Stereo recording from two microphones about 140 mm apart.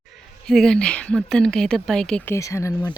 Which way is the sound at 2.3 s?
20° left (ahead or behind).